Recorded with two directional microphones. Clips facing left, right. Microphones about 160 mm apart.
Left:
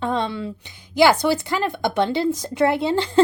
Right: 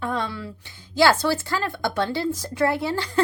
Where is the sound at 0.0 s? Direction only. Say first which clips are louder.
Left 4 dB; 25° left (ahead or behind).